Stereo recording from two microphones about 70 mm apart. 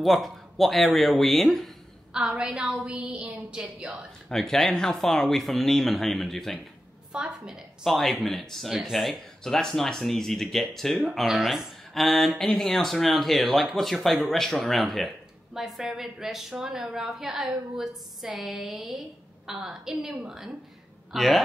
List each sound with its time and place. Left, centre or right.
0.0 s speech: centre
2.1 s a woman's voice: centre
4.3 s speech: centre
7.1 s speech: centre